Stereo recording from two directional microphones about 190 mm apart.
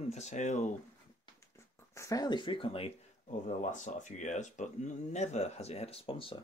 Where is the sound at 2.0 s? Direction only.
20° left (ahead or behind).